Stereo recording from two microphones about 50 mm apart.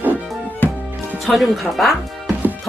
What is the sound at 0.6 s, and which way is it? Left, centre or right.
Music, left.